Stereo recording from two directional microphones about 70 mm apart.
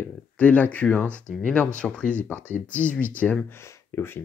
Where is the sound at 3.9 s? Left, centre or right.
Left.